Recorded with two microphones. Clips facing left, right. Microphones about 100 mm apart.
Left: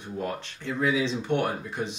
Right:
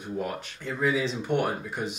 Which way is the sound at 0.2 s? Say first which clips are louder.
Left 4 dB; centre (ahead or behind).